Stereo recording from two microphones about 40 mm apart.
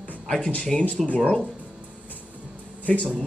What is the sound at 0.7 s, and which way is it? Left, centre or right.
Speech, left.